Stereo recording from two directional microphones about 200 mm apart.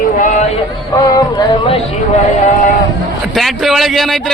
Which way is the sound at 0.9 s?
20° left (ahead or behind).